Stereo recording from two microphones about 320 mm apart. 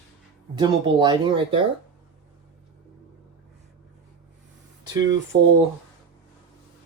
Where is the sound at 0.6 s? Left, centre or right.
Centre.